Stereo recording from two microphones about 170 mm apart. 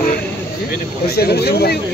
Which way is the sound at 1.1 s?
65° left (ahead or behind).